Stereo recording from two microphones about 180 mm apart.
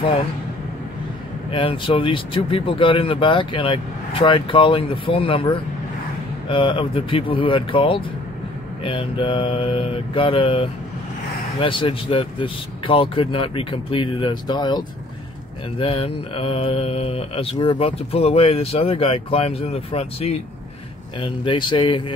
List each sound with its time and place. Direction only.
1.5 s speech: 30° left (ahead or behind)
15.8 s mantra: 30° left (ahead or behind)
21.2 s speech: 25° left (ahead or behind)